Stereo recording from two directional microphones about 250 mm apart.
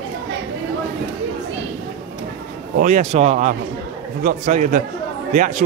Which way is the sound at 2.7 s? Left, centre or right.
Right.